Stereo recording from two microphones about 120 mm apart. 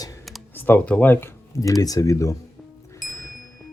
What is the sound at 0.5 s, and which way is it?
Speech, 15° left (ahead or behind).